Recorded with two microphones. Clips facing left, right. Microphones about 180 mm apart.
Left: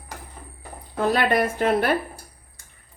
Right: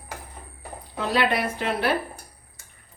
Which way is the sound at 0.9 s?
50° left (ahead or behind).